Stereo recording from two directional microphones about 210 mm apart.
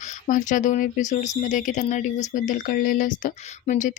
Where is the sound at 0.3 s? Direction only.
40° left (ahead or behind).